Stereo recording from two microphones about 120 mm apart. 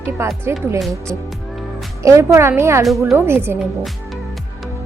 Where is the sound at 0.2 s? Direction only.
20° right (ahead or behind).